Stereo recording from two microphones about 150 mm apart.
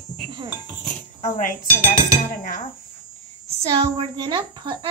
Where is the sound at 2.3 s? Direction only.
65° left (ahead or behind).